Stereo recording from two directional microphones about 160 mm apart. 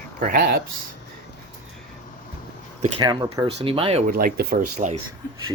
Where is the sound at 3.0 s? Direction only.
25° right (ahead or behind).